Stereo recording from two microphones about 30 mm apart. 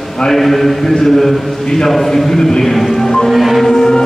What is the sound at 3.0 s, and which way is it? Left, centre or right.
Music, centre.